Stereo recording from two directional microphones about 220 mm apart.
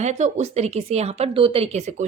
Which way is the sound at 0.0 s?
30° right (ahead or behind).